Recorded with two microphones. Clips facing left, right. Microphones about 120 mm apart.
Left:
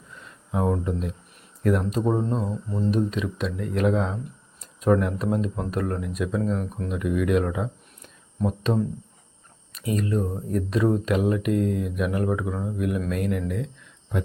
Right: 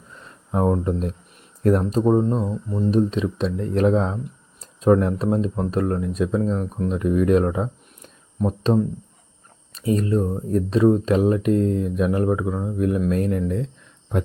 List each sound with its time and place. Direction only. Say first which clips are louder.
0.2 s a sound: right 4 dB; 35° right (ahead or behind)
1.6 s speech: right 5 dB; 35° right (ahead or behind); by 2.9 s 15° right (ahead or behind)
2.9 s speech: right 6 dB; 30° right (ahead or behind)